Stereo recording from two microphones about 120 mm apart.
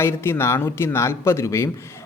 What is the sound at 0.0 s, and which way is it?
Speech, 20° left (ahead or behind).